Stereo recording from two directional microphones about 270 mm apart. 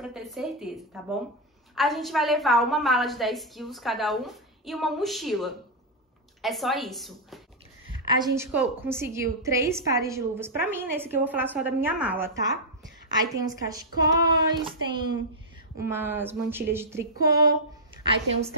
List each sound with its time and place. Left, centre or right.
0.0 s a woman's voice: centre
8.5 s a woman's voice: centre